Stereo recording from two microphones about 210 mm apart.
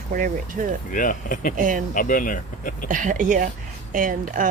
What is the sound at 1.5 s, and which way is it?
Speech, 40° right (ahead or behind).